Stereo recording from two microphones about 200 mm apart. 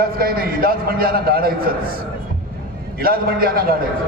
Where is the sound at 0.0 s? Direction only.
50° right (ahead or behind).